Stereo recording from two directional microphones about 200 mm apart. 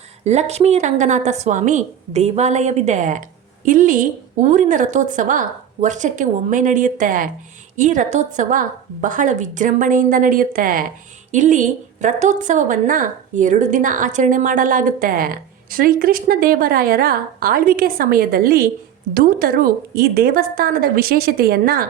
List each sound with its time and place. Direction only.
0.3 s a woman's voice: 35° right (ahead or behind)